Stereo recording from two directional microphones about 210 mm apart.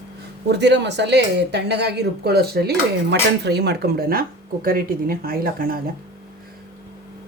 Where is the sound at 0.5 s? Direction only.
55° right (ahead or behind).